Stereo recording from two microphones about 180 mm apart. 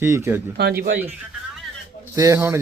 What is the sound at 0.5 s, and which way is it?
Speech, 65° right (ahead or behind).